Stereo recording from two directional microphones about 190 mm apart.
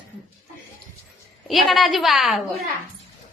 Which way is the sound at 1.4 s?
Centre (ahead or behind).